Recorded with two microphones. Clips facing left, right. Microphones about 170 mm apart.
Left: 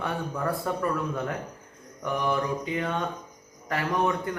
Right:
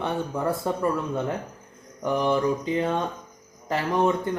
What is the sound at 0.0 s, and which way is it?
Speech, 25° right (ahead or behind).